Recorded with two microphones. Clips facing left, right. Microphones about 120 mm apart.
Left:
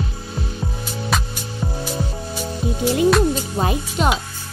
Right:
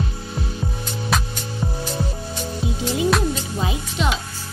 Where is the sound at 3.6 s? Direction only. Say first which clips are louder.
Left 5 dB; 50° left (ahead or behind).